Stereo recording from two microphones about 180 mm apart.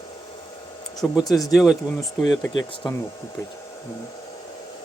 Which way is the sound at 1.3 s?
Centre (ahead or behind).